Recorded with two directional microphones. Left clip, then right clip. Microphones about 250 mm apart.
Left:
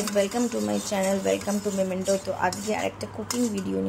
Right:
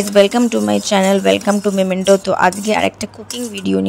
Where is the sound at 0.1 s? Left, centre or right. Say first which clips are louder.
Right 14 dB; right.